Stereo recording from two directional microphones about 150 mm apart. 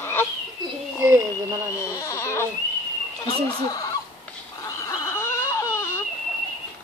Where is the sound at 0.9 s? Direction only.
15° right (ahead or behind).